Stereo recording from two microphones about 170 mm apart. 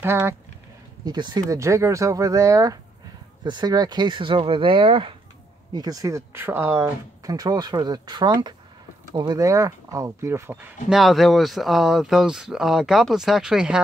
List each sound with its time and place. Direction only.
0.0 s speech: 15° right (ahead or behind)
1.0 s speech: 25° right (ahead or behind); by 13.7 s 5° right (ahead or behind)